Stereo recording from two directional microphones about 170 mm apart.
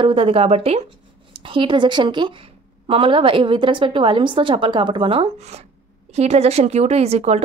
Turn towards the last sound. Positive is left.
turn(degrees=-40)  # may be behind; listen again after turning